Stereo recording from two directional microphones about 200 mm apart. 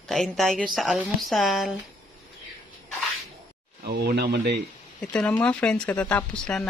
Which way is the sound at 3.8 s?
55° right (ahead or behind).